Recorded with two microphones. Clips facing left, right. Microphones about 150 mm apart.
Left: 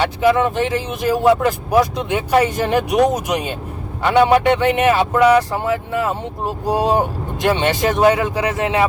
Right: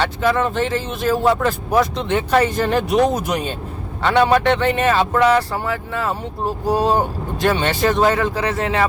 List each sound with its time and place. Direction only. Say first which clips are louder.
0.0 s a man's voice: left 3 dB; 15° left (ahead or behind)